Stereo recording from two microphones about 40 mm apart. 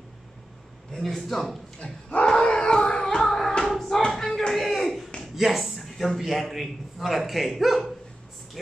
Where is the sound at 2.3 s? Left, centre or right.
Centre.